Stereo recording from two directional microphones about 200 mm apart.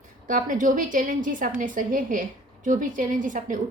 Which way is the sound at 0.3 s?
40° right (ahead or behind).